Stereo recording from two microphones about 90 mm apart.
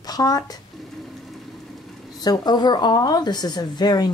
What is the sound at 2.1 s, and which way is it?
Speech, 50° left (ahead or behind).